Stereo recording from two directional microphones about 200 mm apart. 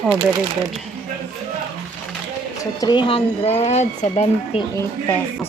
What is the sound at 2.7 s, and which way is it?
Speech, 20° left (ahead or behind).